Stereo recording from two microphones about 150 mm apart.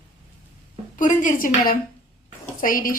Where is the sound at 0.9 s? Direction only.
60° left (ahead or behind).